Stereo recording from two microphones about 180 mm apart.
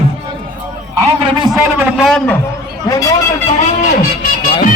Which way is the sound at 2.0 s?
Centre (ahead or behind).